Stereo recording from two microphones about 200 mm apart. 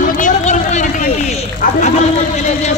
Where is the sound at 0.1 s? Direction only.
40° left (ahead or behind).